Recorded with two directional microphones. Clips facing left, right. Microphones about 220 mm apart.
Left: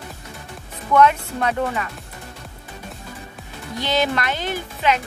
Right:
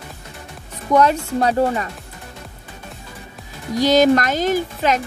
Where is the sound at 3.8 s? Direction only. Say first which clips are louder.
Right 8 dB; 40° right (ahead or behind).